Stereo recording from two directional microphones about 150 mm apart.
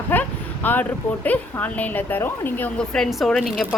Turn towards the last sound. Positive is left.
turn(degrees=5)  # may be behind; listen again after turning